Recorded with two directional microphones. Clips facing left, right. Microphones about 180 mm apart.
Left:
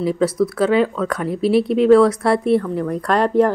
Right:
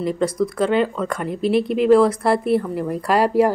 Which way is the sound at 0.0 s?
5° left (ahead or behind).